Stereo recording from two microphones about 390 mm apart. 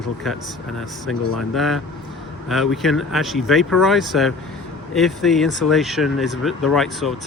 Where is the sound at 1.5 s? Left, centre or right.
Centre.